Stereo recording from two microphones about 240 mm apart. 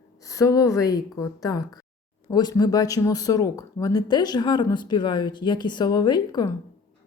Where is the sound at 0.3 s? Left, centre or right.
Centre.